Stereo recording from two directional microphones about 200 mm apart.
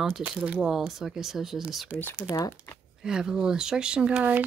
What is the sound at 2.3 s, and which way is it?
Speech, 15° left (ahead or behind).